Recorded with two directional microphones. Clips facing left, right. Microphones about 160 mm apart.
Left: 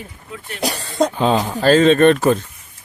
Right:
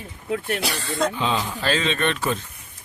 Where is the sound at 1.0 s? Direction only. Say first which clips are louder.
Left 8 dB; 45° left (ahead or behind).